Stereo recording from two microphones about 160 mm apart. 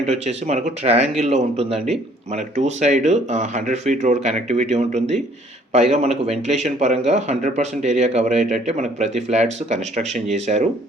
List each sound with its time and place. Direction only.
0.0 s speech: 40° right (ahead or behind)